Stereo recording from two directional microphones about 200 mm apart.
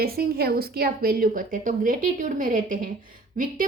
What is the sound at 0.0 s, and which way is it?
A woman's voice, 50° right (ahead or behind).